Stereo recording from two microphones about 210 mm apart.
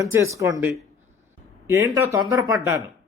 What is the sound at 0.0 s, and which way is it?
A man's voice, 15° right (ahead or behind).